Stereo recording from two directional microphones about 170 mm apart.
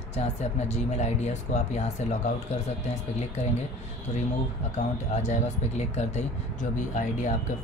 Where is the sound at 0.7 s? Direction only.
40° left (ahead or behind).